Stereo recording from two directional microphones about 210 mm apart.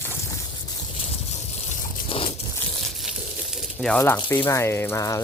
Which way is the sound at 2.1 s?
25° left (ahead or behind).